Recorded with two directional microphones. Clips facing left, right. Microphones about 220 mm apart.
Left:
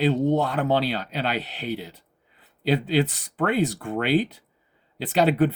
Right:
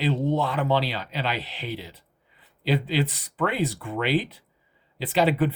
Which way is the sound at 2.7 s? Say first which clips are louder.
Left 3 dB; 45° left (ahead or behind).